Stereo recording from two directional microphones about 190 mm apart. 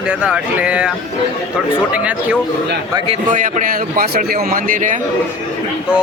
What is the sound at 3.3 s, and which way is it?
A man's voice, 45° right (ahead or behind).